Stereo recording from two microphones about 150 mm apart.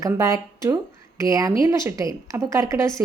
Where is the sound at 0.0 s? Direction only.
20° right (ahead or behind).